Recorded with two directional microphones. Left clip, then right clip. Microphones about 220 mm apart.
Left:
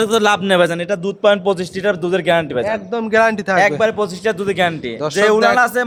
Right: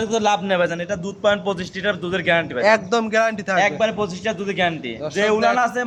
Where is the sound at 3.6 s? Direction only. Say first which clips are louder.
Left 4 dB; 55° left (ahead or behind).